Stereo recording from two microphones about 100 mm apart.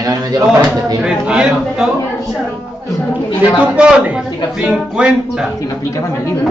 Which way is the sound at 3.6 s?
10° right (ahead or behind).